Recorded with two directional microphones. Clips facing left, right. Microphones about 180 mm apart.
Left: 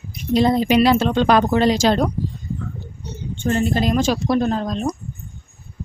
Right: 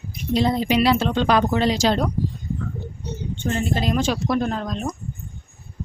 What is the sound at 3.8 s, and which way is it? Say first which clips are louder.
Speech: left 3 dB; 45° left (ahead or behind).